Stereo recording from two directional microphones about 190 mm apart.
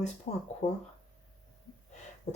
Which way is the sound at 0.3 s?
40° left (ahead or behind).